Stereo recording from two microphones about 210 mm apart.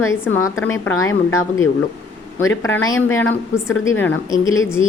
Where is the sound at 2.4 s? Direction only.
70° left (ahead or behind).